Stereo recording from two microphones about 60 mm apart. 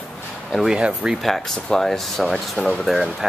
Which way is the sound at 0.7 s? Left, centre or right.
Centre.